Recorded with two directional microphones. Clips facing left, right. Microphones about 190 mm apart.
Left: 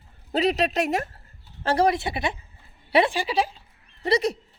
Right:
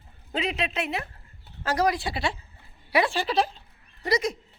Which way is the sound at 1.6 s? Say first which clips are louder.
Left 3 dB; 30° left (ahead or behind).